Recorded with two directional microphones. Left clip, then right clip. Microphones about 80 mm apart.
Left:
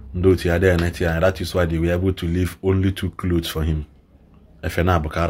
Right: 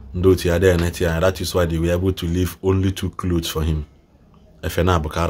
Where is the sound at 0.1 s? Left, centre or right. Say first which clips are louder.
Right 1 dB; right.